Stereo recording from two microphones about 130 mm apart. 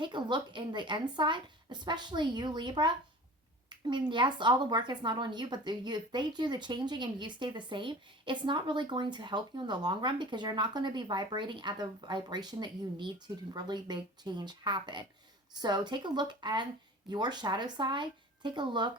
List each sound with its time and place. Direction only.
0.0 s a woman's voice: 35° right (ahead or behind)
3.7 s a sound: 35° right (ahead or behind)
4.1 s a woman's voice: 35° right (ahead or behind)